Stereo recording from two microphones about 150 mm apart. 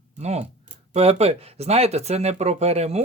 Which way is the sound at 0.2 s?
45° right (ahead or behind).